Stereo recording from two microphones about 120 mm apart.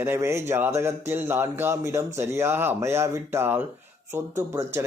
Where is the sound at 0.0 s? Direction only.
20° right (ahead or behind).